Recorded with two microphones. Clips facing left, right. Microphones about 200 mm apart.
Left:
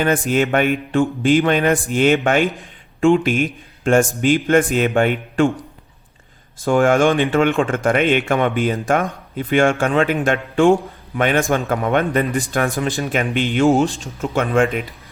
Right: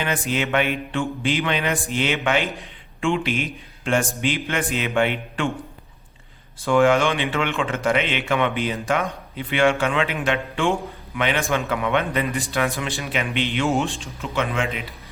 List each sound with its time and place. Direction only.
0.0 s a man's voice: 45° left (ahead or behind)
6.7 s a man's voice: 45° left (ahead or behind)